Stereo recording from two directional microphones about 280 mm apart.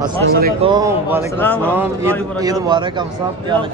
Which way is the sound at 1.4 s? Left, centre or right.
Centre.